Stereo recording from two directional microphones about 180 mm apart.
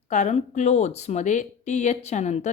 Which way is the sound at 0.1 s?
40° left (ahead or behind).